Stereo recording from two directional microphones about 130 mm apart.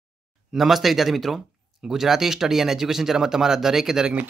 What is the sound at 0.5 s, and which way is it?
Speech, centre (ahead or behind).